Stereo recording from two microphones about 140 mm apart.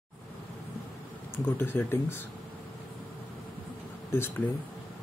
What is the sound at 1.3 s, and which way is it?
Speech, 15° left (ahead or behind).